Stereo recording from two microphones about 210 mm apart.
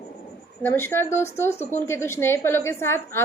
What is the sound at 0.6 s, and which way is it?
A woman's voice, 10° left (ahead or behind).